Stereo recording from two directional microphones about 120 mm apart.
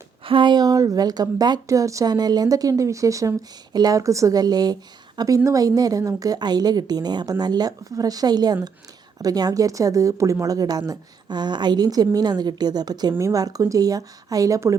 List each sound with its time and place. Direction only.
0.3 s a woman's voice: 45° right (ahead or behind); by 14.8 s 25° right (ahead or behind)